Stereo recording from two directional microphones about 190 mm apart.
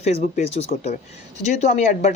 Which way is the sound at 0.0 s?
35° left (ahead or behind).